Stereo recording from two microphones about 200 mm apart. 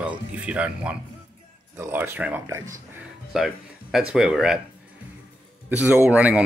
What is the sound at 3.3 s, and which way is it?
Speech, centre (ahead or behind).